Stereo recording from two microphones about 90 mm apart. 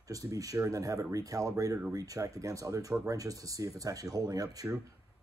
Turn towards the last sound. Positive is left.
turn(degrees=-45)  # may be behind; listen again after turning